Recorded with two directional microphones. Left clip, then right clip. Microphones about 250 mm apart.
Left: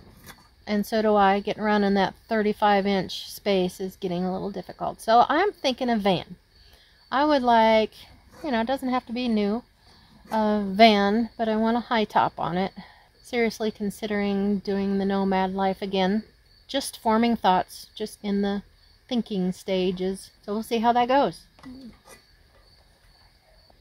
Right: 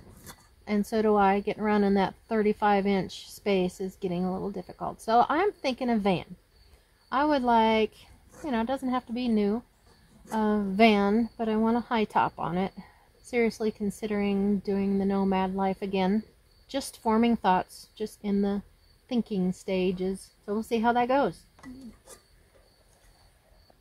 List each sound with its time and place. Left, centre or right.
0.7 s speech: left